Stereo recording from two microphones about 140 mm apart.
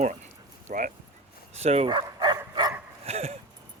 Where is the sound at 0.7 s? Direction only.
65° right (ahead or behind).